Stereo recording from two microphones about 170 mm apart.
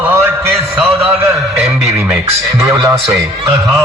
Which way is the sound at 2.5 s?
15° right (ahead or behind).